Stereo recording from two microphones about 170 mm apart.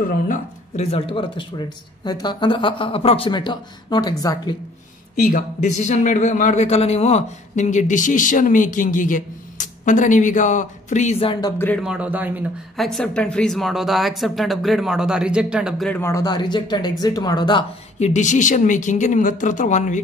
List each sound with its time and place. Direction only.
0.3 s speech: 40° left (ahead or behind); by 4.6 s 20° left (ahead or behind)
5.1 s speech: 55° left (ahead or behind); by 11.5 s 35° left (ahead or behind)
11.5 s a man's voice: 10° left (ahead or behind)
11.8 s speech: 5° right (ahead or behind)
12.7 s speech: centre (ahead or behind)
15.9 s speech: 15° left (ahead or behind)
17.9 s speech: 45° left (ahead or behind)